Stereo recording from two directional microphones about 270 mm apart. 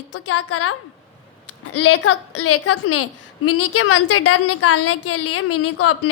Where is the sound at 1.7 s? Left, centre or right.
Left.